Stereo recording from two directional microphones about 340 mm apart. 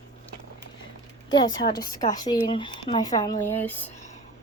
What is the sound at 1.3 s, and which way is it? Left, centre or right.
Speech, centre.